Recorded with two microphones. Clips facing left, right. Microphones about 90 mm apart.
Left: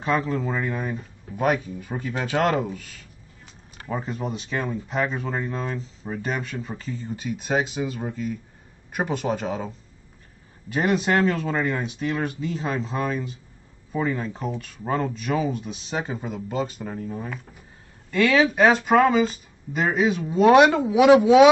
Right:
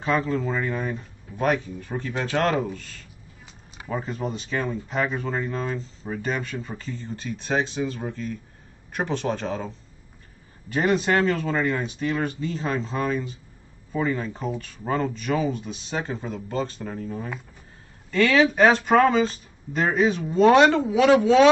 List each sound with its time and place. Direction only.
0.0 s speech: centre (ahead or behind)